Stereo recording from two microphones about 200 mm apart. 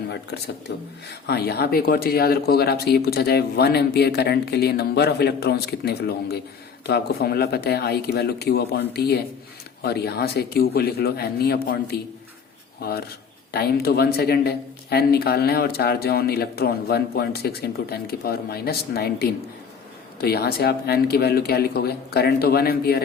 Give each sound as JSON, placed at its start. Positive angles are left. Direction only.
{"t": 0.1, "sound": "speech", "side_deg": 55}
{"t": 13.5, "sound": "speech", "side_deg": 50}